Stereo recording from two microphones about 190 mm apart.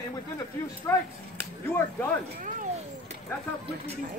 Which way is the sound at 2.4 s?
45° right (ahead or behind).